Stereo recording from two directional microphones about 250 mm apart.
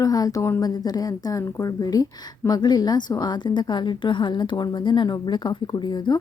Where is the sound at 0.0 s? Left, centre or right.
Centre.